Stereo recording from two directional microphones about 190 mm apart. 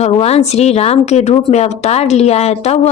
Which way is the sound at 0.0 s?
35° left (ahead or behind).